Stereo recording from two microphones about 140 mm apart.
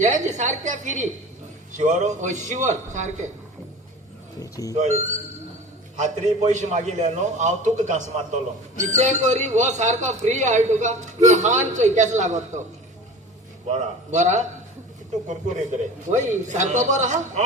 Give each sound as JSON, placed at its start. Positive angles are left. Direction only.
{"t": 0.0, "sound": "speech", "side_deg": -60}
{"t": 4.4, "sound": "speech", "side_deg": 25}
{"t": 4.8, "sound": "speech", "side_deg": -55}
{"t": 13.7, "sound": "speech", "side_deg": -60}
{"t": 16.0, "sound": "speech", "side_deg": -60}